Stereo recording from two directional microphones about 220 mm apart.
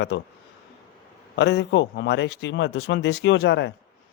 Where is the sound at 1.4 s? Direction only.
50° left (ahead or behind).